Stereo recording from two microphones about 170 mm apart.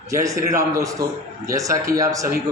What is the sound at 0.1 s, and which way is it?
A man's voice, 20° right (ahead or behind).